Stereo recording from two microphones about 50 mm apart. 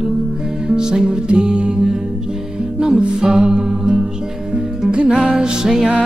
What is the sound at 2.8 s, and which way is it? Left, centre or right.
Music, centre.